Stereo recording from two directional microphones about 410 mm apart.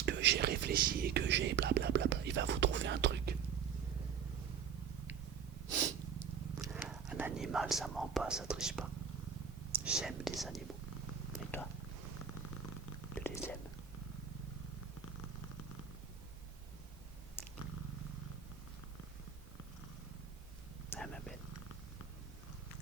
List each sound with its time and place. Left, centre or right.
0.0 s whispering: right
6.1 s purr: centre
9.7 s whispering: centre
13.1 s whispering: centre
17.4 s purr: centre
20.9 s purr: centre